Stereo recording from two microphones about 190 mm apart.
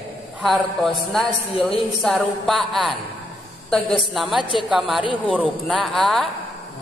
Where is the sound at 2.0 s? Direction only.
Centre (ahead or behind).